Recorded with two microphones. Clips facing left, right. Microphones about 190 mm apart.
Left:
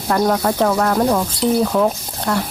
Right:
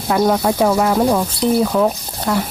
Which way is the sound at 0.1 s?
5° right (ahead or behind).